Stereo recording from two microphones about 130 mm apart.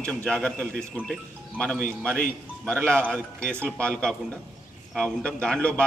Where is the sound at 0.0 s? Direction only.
10° left (ahead or behind).